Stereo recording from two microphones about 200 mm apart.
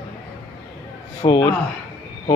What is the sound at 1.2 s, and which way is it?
Speech, 25° left (ahead or behind).